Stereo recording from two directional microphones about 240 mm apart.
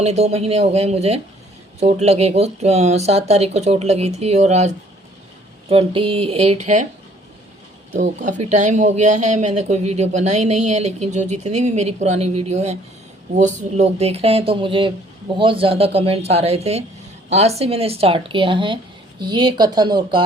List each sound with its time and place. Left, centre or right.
0.0 s speech: right
7.9 s speech: right